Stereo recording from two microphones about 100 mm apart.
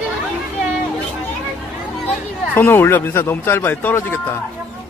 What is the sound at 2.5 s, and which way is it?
A man's voice, 20° left (ahead or behind).